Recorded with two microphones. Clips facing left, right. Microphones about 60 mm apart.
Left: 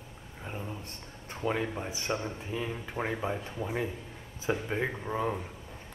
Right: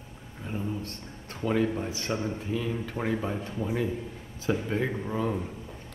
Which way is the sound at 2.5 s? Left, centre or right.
Left.